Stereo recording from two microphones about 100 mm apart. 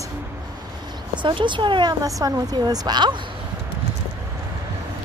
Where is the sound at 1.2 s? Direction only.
50° right (ahead or behind).